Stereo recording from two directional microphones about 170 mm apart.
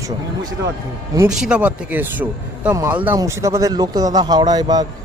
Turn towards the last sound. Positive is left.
turn(degrees=-25)  # may be behind; listen again after turning